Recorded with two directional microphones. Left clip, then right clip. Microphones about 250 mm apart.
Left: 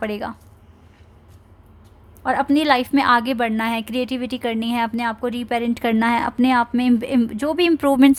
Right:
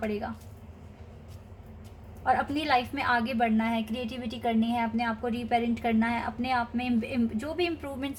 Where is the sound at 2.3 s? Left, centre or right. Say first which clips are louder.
Left 8 dB; left.